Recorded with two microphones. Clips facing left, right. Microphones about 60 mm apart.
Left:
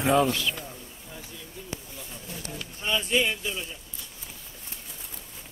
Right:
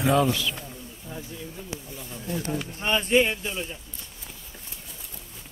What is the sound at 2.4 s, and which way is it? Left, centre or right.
Speech, right.